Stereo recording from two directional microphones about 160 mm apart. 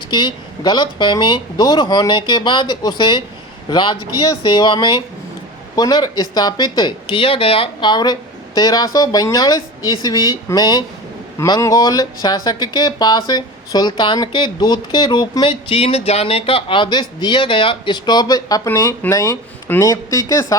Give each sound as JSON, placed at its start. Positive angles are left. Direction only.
{"t": 0.1, "sound": "speech", "side_deg": 30}